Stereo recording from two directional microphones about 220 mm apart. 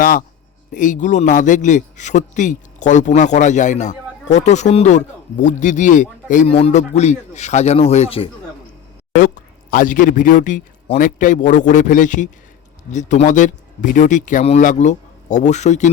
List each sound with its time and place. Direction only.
0.0 s a man's voice: 40° left (ahead or behind)
9.1 s a man's voice: 35° left (ahead or behind)